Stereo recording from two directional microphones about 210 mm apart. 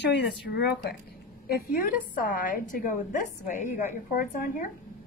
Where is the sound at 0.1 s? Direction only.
50° left (ahead or behind).